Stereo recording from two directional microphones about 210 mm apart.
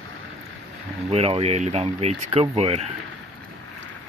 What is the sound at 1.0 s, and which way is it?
Speech, 30° right (ahead or behind).